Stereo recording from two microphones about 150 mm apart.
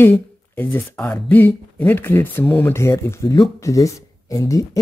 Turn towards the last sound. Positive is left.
turn(degrees=20)  # may be behind; listen again after turning